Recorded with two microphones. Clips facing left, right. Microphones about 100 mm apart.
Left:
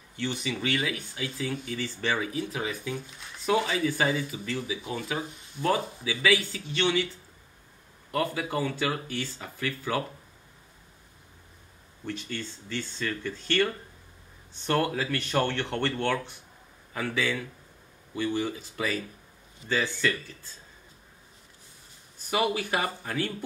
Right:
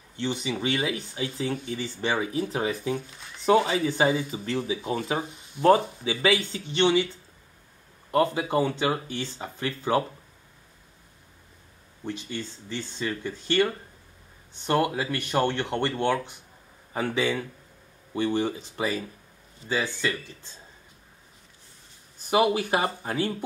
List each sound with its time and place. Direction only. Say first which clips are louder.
0.2 s speech: right 3 dB; 20° right (ahead or behind)
8.1 s speech: right 6 dB; 25° right (ahead or behind)
12.0 s speech: right 2 dB; 15° right (ahead or behind)
16.9 s speech: right 3 dB; 25° right (ahead or behind)
22.3 s speech: right 5 dB; 25° right (ahead or behind)